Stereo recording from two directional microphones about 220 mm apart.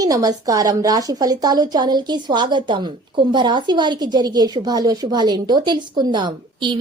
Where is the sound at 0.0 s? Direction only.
15° right (ahead or behind).